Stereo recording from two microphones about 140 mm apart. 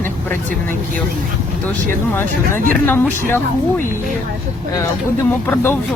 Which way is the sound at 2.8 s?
15° left (ahead or behind).